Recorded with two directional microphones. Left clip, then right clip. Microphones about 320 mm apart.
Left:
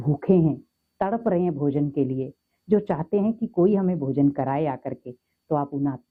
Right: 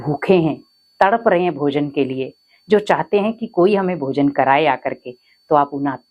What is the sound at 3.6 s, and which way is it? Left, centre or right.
Speech, centre.